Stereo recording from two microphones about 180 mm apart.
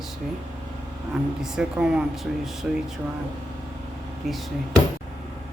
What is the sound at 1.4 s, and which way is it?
Speech, 5° right (ahead or behind).